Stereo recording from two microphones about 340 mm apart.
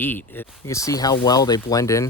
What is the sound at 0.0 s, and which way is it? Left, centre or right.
Speech, centre.